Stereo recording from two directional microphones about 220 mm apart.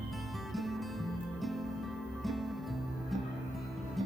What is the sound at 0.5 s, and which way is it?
Music, centre (ahead or behind).